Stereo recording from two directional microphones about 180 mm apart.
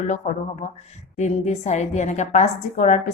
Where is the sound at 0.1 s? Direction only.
40° left (ahead or behind).